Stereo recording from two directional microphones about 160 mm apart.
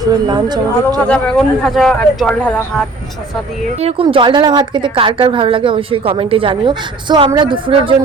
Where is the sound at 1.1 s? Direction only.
5° left (ahead or behind).